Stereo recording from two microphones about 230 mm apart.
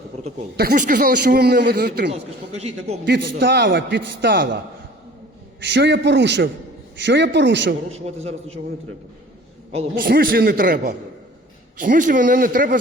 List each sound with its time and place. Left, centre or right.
0.5 s a man's voice: right
3.2 s a man's voice: right
5.6 s a man's voice: right
7.9 s a man's voice: right
9.7 s a man's voice: right